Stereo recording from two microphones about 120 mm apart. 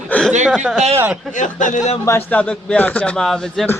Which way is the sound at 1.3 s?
90° left.